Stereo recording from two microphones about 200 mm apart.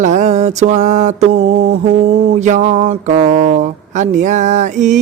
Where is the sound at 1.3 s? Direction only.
75° right (ahead or behind).